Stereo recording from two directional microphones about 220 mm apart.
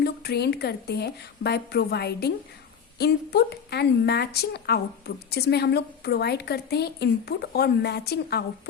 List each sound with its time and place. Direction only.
0.0 s a woman's voice: 45° left (ahead or behind)